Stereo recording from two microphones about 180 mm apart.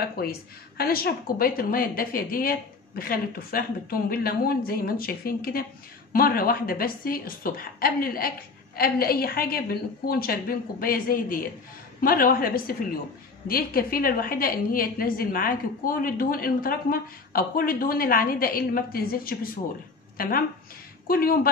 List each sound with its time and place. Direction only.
0.2 s a woman's voice: 60° left (ahead or behind)